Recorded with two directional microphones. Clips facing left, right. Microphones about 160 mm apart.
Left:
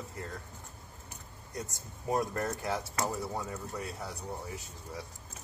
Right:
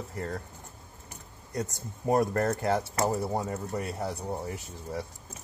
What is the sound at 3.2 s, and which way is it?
Speech, 45° right (ahead or behind).